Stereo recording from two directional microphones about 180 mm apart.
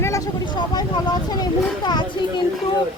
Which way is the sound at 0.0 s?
20° left (ahead or behind).